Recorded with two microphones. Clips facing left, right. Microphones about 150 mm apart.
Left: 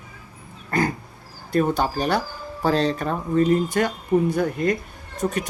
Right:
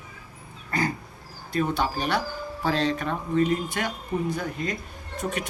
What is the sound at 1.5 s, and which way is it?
Speech, 45° left (ahead or behind).